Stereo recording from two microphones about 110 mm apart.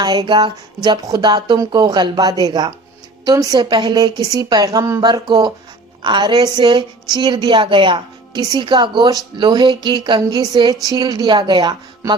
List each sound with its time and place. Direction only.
0.0 s a woman's voice: 40° right (ahead or behind)
5.0 s a woman's voice: 40° right (ahead or behind)